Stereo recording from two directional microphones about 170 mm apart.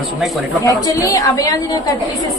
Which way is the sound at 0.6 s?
20° left (ahead or behind).